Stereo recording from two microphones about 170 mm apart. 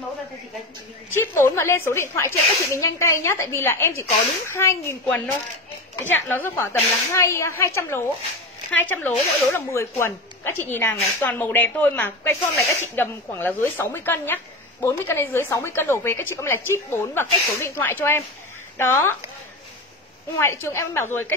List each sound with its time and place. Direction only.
1.1 s a woman's voice: 15° left (ahead or behind)
20.3 s a woman's voice: 15° left (ahead or behind)